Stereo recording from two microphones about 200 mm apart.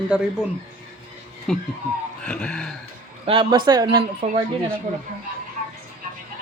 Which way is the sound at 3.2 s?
25° right (ahead or behind).